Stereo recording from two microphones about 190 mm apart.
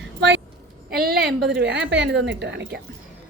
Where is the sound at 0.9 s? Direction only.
55° right (ahead or behind).